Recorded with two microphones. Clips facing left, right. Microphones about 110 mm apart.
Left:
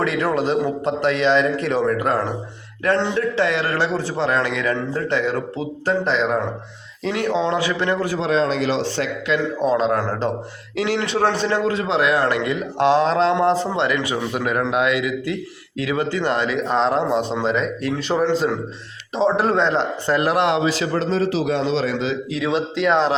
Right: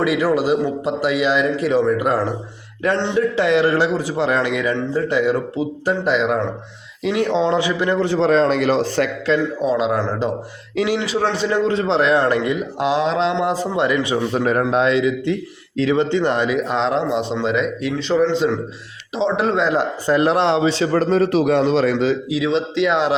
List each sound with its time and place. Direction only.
0.0 s a man's voice: 5° right (ahead or behind)
7.1 s a man's voice: 20° right (ahead or behind)
8.2 s a man's voice: 45° right (ahead or behind)
9.6 s a man's voice: 5° right (ahead or behind)
11.7 s a man's voice: 30° right (ahead or behind)
13.0 s a man's voice: centre (ahead or behind)
13.4 s a man's voice: 10° right (ahead or behind)
13.9 s a man's voice: 25° right (ahead or behind)
16.6 s a man's voice: centre (ahead or behind)
18.1 s a man's voice: 5° left (ahead or behind)
20.1 s a man's voice: 20° right (ahead or behind)
21.0 s a man's voice: 55° right (ahead or behind)
22.4 s a man's voice: 5° left (ahead or behind)